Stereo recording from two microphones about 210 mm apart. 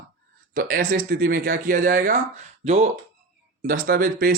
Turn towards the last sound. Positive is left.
turn(degrees=-45)  # may be behind; listen again after turning